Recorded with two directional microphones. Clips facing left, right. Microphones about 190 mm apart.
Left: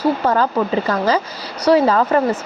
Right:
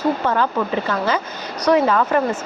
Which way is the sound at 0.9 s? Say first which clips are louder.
Left 3 dB; 35° left (ahead or behind).